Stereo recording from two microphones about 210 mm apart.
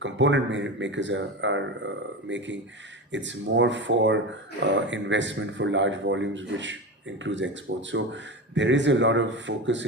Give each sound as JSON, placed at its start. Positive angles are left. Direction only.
{"t": 0.0, "sound": "speech", "side_deg": -60}